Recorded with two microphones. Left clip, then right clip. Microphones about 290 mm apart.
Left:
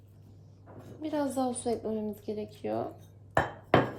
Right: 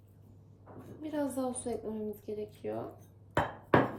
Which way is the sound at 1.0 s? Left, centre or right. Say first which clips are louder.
Left 4 dB; left.